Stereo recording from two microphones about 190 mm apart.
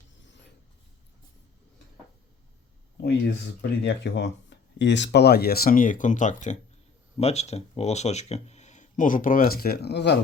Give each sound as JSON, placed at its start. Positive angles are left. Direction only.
{"t": 3.6, "sound": "speech", "side_deg": 65}